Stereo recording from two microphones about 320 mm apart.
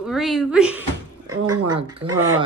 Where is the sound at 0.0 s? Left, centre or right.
Centre.